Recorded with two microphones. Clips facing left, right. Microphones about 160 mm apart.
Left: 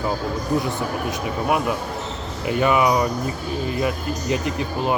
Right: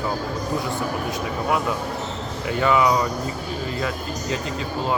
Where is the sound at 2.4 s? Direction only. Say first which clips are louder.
Left 1 dB; 20° left (ahead or behind).